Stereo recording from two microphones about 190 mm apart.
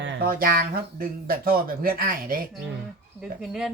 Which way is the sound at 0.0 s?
70° right (ahead or behind).